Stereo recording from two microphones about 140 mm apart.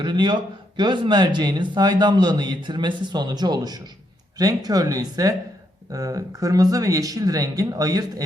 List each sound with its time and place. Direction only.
0.0 s speech: 35° right (ahead or behind)